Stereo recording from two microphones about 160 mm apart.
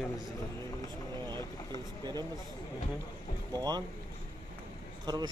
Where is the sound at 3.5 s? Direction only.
25° right (ahead or behind).